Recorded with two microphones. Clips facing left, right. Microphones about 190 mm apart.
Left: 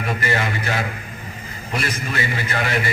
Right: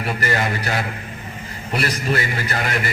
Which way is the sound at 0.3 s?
40° right (ahead or behind).